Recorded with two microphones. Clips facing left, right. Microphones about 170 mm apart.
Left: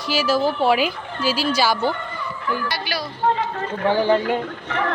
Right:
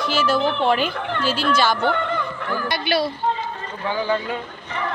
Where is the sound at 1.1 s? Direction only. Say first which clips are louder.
Right 1 dB; 55° right (ahead or behind).